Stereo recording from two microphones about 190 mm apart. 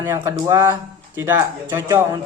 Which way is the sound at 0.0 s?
15° right (ahead or behind).